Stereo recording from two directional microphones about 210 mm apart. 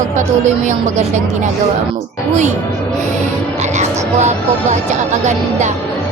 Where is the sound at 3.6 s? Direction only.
35° right (ahead or behind).